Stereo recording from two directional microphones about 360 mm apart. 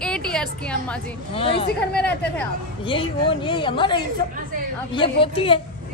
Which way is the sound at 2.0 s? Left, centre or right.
Centre.